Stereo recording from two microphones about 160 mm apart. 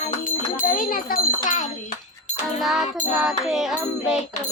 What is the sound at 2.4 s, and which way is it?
Music, centre (ahead or behind).